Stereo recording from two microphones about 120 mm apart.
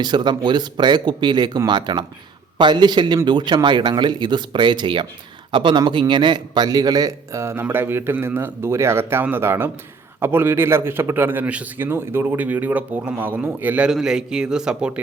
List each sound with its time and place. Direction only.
0.0 s a man's voice: 35° right (ahead or behind); by 15.0 s 10° right (ahead or behind)